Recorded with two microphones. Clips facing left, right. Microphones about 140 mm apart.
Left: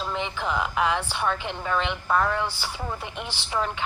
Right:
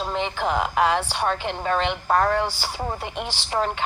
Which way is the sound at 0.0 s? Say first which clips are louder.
Right 4 dB; 35° right (ahead or behind).